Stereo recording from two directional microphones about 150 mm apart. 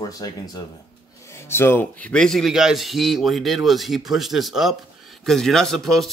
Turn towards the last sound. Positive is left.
turn(degrees=0)  # may be behind; listen again after turning